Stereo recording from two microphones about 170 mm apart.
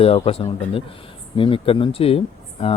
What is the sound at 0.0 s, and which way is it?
Speech, 35° left (ahead or behind).